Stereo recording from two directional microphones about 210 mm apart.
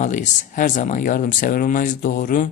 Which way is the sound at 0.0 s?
35° left (ahead or behind).